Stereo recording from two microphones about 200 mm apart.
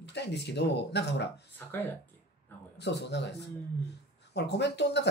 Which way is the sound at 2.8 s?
60° left (ahead or behind).